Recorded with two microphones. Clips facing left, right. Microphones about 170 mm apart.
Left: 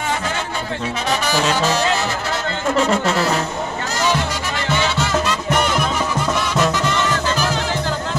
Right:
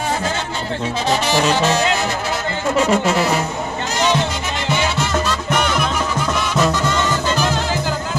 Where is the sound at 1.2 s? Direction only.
25° right (ahead or behind).